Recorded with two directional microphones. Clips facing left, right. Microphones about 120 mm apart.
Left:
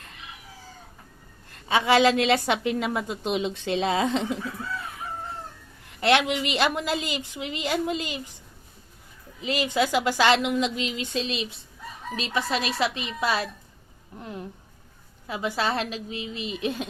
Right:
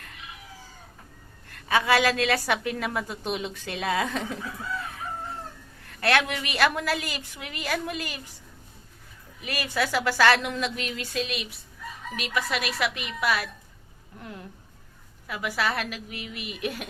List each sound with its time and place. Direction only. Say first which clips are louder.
1.5 s a woman's voice: left 1 dB; 25° left (ahead or behind)
5.9 s a woman's voice: left 3 dB; 20° left (ahead or behind)
9.4 s a woman's voice: left 4 dB; 20° left (ahead or behind)